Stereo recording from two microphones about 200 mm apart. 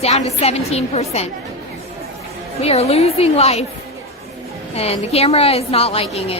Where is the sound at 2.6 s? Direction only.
30° left (ahead or behind).